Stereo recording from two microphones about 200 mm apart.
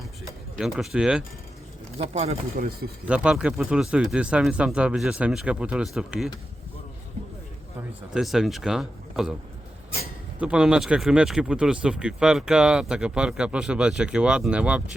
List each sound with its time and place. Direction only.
0.6 s speech: centre (ahead or behind)
2.0 s speech: 30° right (ahead or behind)
2.3 s speech: 50° right (ahead or behind)
3.1 s speech: 5° right (ahead or behind)
8.1 s speech: centre (ahead or behind)
10.4 s speech: 5° right (ahead or behind)